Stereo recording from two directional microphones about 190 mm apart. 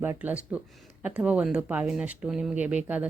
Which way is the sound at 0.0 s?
10° right (ahead or behind).